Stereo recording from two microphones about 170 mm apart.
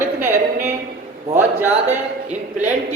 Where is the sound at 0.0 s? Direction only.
15° right (ahead or behind).